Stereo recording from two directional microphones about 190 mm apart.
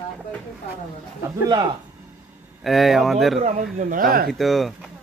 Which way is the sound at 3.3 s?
40° right (ahead or behind).